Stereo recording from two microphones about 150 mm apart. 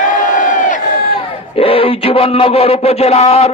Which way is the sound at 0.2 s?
60° left (ahead or behind).